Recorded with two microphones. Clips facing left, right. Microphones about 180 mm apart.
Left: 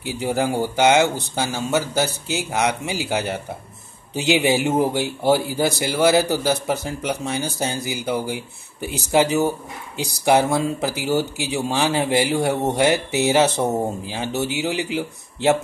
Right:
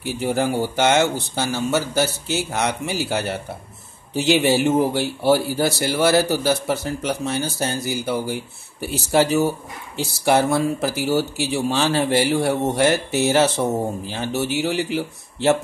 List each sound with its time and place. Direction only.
0.0 s speech: 15° left (ahead or behind)